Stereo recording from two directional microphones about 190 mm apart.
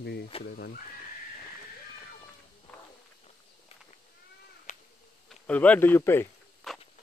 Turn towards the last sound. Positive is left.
turn(degrees=0)  # may be behind; listen again after turning